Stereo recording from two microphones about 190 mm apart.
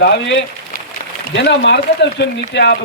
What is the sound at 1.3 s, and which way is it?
Speech, 65° left (ahead or behind).